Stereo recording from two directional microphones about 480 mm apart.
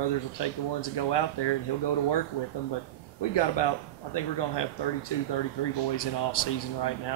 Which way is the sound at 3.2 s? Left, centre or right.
Left.